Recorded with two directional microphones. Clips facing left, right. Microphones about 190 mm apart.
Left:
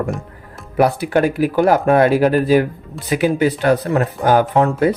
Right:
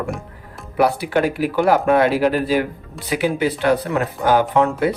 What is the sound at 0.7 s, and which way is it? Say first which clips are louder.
Speech: left 2 dB; 50° left (ahead or behind).